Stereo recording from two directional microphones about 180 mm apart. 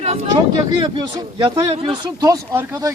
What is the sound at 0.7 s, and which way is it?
Speech, 25° right (ahead or behind).